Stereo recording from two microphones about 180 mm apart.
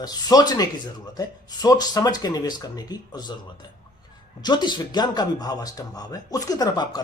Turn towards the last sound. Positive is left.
turn(degrees=20)  # may be behind; listen again after turning